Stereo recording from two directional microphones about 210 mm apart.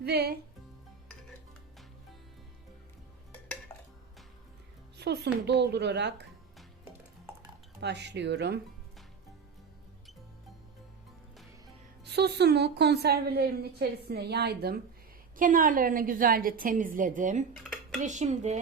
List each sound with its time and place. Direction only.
0.0 s a woman's voice: 50° right (ahead or behind)
4.9 s a child's voice: 55° right (ahead or behind)
7.8 s speech: 55° right (ahead or behind)
12.0 s a woman's voice: 50° right (ahead or behind)
15.4 s a woman's voice: 40° right (ahead or behind)